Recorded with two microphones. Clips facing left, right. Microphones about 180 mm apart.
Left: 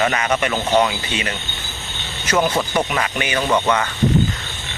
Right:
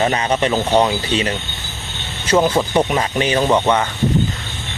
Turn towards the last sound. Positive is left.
turn(degrees=-25)  # may be behind; listen again after turning